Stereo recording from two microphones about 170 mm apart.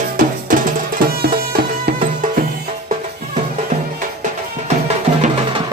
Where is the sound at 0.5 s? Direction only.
55° right (ahead or behind).